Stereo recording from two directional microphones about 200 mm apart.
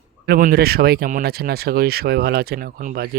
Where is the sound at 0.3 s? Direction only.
45° right (ahead or behind).